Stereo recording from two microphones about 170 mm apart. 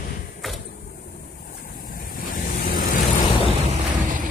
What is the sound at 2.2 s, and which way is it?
Vehicle, 60° left (ahead or behind).